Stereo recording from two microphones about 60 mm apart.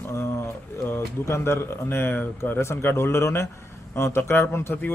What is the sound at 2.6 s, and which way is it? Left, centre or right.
A man's voice, left.